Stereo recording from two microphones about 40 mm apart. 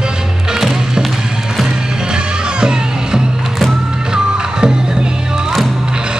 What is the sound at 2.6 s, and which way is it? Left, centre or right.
Music, centre.